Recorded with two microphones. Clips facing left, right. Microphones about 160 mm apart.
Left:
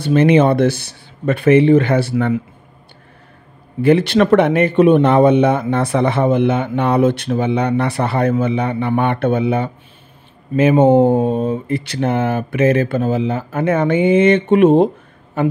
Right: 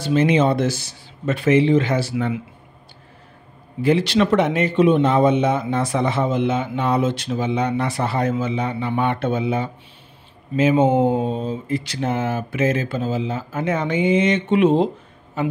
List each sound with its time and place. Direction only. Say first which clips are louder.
0.0 s speech: left 5 dB; 60° left (ahead or behind)
3.8 s speech: left 5 dB; 55° left (ahead or behind)